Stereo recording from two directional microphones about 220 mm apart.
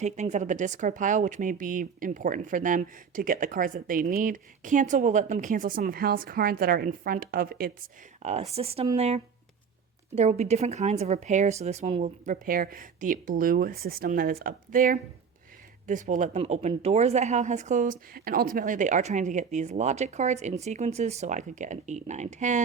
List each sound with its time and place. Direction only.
0.0 s speech: 30° right (ahead or behind)
8.2 s speech: 30° right (ahead or behind)